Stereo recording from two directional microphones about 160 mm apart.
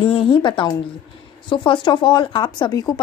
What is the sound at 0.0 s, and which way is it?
Speech, 35° left (ahead or behind).